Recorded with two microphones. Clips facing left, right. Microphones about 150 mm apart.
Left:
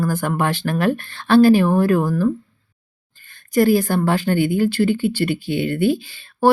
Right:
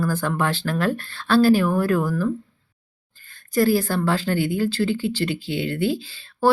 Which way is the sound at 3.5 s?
20° left (ahead or behind).